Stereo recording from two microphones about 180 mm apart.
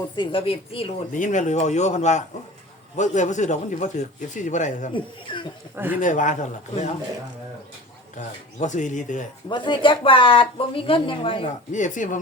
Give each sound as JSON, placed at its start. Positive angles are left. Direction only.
{"t": 0.2, "sound": "speech", "side_deg": 30}
{"t": 1.1, "sound": "a man's voice", "side_deg": 45}
{"t": 4.9, "sound": "speech", "side_deg": 25}
{"t": 5.7, "sound": "a man's voice", "side_deg": -10}
{"t": 6.0, "sound": "a man's voice", "side_deg": 45}
{"t": 8.1, "sound": "a man's voice", "side_deg": 45}
{"t": 9.5, "sound": "speech", "side_deg": 25}
{"t": 11.7, "sound": "a man's voice", "side_deg": 45}